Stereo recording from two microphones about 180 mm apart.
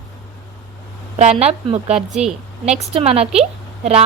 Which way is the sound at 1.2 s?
35° right (ahead or behind).